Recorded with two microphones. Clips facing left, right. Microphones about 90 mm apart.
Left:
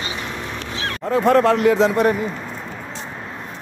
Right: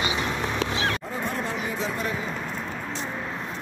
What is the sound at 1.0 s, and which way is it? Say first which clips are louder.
Speech: left 15 dB; 90° left.